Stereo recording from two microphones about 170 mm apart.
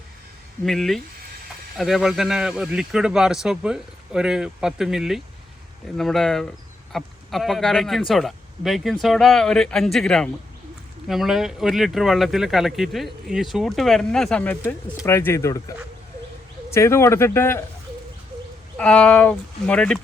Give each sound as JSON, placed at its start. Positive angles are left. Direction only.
{"t": 0.6, "sound": "speech", "side_deg": 0}
{"t": 18.8, "sound": "speech", "side_deg": 5}